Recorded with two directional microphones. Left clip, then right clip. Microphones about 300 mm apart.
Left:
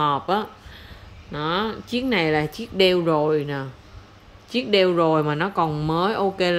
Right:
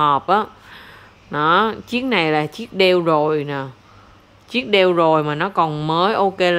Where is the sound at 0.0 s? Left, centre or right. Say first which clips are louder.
Right 6 dB; centre.